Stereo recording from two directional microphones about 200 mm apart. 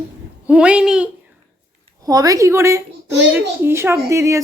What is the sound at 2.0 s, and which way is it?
A woman's voice, 20° right (ahead or behind).